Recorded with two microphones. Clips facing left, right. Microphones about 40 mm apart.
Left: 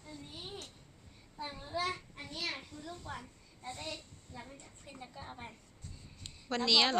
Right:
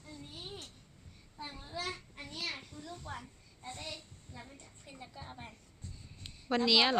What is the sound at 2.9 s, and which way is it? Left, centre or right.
Speech, centre.